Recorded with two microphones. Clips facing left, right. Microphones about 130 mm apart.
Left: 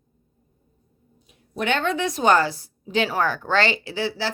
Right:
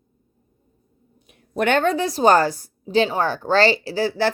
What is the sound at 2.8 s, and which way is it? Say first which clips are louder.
Speech: right 3 dB; 35° right (ahead or behind).